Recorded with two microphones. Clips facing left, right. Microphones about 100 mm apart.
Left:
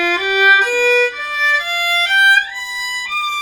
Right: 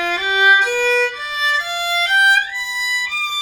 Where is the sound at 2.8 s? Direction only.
55° left (ahead or behind).